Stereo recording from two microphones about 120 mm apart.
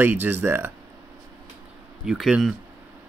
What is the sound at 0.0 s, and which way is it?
Speech, 15° right (ahead or behind).